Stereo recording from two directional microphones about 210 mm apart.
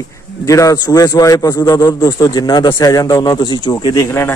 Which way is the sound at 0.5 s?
15° left (ahead or behind).